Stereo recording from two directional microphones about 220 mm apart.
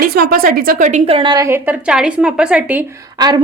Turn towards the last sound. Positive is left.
turn(degrees=-20)  # may be behind; listen again after turning